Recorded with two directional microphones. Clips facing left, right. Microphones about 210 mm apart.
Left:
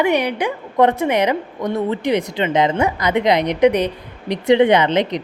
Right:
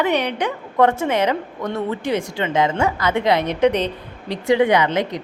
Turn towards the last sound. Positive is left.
turn(degrees=20)  # may be behind; listen again after turning